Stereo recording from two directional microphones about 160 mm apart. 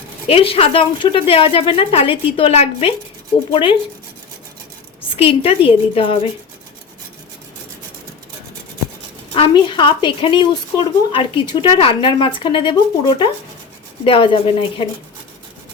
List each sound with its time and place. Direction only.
0.3 s a woman's voice: 35° left (ahead or behind)
5.0 s a woman's voice: 35° left (ahead or behind)
9.3 s a woman's voice: 35° left (ahead or behind)